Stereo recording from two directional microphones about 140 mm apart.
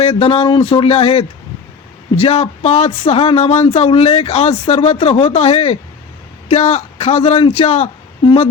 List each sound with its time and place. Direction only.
0.0 s speech: 40° left (ahead or behind)